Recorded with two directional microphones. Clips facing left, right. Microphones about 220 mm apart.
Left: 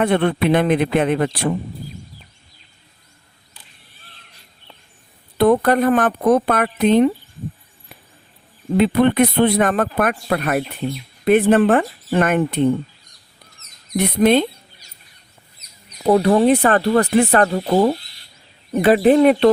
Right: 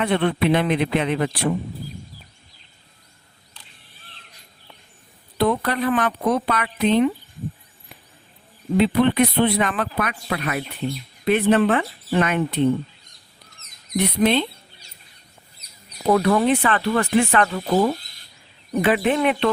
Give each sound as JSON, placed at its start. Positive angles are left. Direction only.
{"t": 0.0, "sound": "speech", "side_deg": 50}
{"t": 5.4, "sound": "speech", "side_deg": 50}
{"t": 8.8, "sound": "speech", "side_deg": 50}
{"t": 13.9, "sound": "speech", "side_deg": 50}
{"t": 16.0, "sound": "speech", "side_deg": 30}